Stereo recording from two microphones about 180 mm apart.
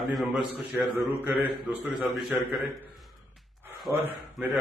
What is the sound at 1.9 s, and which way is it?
Speech, centre (ahead or behind).